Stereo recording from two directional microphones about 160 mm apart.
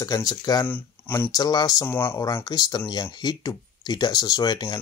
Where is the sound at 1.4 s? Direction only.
25° left (ahead or behind).